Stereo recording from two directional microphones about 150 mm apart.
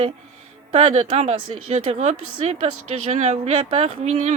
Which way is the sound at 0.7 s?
45° right (ahead or behind).